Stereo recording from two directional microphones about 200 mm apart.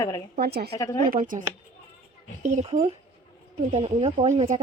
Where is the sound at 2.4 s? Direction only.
35° right (ahead or behind).